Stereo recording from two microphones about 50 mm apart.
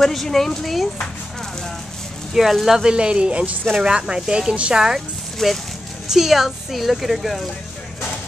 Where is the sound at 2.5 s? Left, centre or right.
Centre.